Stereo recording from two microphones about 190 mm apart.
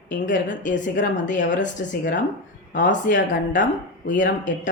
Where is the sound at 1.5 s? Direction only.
40° left (ahead or behind).